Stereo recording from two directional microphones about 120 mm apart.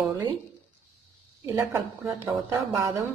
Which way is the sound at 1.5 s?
25° right (ahead or behind).